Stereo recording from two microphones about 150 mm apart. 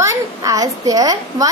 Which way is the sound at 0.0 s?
20° right (ahead or behind).